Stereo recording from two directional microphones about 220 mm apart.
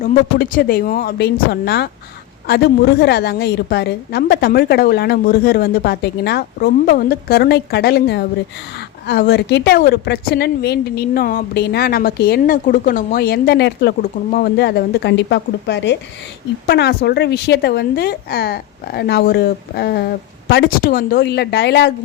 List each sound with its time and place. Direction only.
0.0 s a woman's voice: 40° left (ahead or behind)